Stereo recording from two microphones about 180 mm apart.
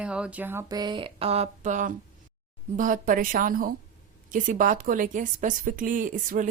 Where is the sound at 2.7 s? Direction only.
50° right (ahead or behind).